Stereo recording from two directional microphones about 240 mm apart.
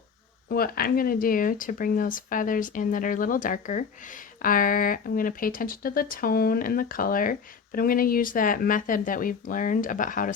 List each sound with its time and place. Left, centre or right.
0.4 s speech: left